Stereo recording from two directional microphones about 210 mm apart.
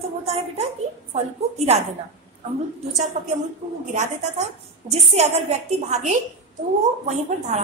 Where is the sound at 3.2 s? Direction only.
40° right (ahead or behind).